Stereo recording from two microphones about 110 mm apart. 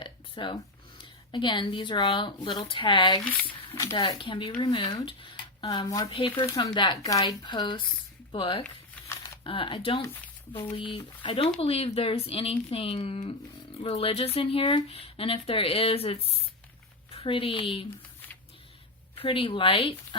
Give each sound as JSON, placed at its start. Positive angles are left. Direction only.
{"t": 0.0, "sound": "a sound", "side_deg": 45}
{"t": 1.3, "sound": "a woman's voice", "side_deg": 45}
{"t": 3.8, "sound": "a woman's voice", "side_deg": 35}
{"t": 11.6, "sound": "speech", "side_deg": 60}
{"t": 19.2, "sound": "a woman's voice", "side_deg": 55}